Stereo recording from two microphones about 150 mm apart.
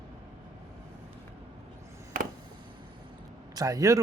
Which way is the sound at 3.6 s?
25° right (ahead or behind).